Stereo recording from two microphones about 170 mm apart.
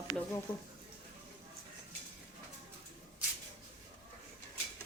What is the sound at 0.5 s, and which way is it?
Speech, 25° left (ahead or behind).